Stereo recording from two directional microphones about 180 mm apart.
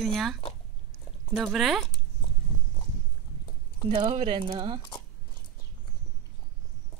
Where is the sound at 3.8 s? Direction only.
30° right (ahead or behind).